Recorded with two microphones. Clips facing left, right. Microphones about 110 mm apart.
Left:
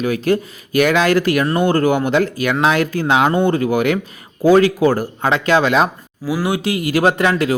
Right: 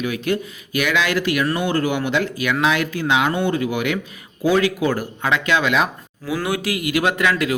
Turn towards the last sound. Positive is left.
turn(degrees=35)  # may be behind; listen again after turning